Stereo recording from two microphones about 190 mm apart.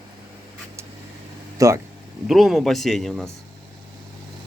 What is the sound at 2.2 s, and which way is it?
Speech, centre (ahead or behind).